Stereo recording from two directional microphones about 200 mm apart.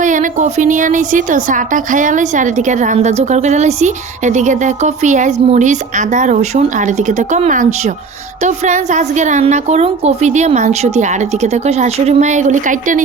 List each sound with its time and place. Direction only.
0.0 s a woman's voice: 40° right (ahead or behind)